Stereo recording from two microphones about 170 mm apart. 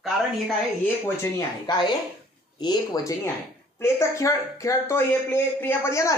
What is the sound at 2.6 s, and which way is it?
Speech, 25° left (ahead or behind).